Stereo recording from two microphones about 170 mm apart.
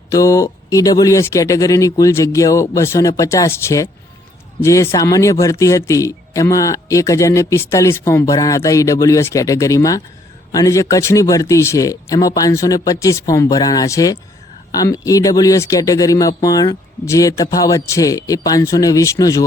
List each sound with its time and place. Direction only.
0.1 s a man's voice: 20° left (ahead or behind)